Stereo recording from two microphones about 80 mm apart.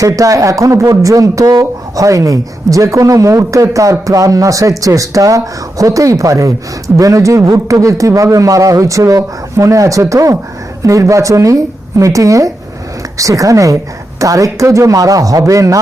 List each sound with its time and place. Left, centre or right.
0.0 s speech: right